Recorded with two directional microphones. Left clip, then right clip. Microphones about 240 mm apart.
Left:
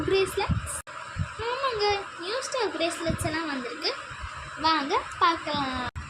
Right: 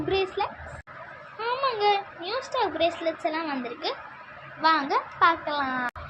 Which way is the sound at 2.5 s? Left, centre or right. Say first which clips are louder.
Right 4 dB; centre.